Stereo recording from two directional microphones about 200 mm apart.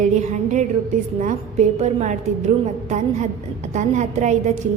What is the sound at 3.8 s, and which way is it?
Speech, 35° right (ahead or behind).